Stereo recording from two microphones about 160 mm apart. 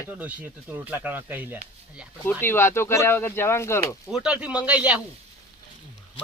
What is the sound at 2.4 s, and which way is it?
Speech, 15° left (ahead or behind).